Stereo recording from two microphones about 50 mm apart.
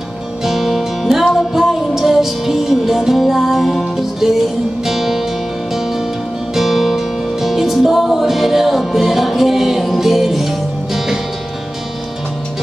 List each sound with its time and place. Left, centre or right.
0.4 s music: centre